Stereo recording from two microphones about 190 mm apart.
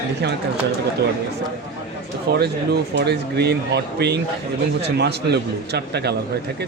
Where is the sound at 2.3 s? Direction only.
60° right (ahead or behind).